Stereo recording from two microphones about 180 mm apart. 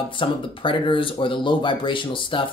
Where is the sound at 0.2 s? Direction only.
30° left (ahead or behind).